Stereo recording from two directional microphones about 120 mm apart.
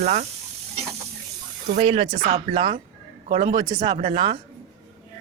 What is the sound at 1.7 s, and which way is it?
Speech, 65° right (ahead or behind).